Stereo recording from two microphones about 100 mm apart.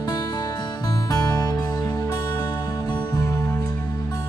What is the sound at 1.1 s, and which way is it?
Music, 30° left (ahead or behind).